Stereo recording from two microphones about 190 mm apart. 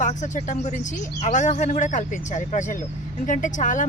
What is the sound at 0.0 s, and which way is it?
A woman's voice, 40° left (ahead or behind).